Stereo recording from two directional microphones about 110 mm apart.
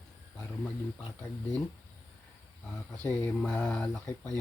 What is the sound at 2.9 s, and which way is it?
Speech, 15° left (ahead or behind).